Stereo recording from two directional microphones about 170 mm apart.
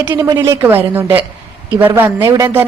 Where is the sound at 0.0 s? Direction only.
10° right (ahead or behind).